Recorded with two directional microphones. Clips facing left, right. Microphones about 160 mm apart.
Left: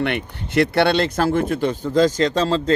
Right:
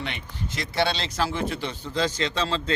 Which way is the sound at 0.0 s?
60° left (ahead or behind).